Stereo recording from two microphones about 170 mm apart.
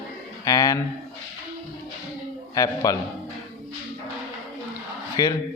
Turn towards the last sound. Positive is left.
turn(degrees=20)  # may be behind; listen again after turning